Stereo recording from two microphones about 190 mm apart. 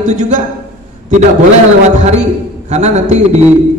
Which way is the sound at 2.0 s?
40° right (ahead or behind).